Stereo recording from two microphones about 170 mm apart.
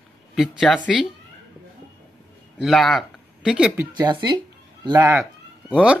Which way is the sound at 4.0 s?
25° right (ahead or behind).